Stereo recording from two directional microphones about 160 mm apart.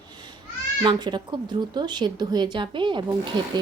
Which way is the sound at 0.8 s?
25° right (ahead or behind).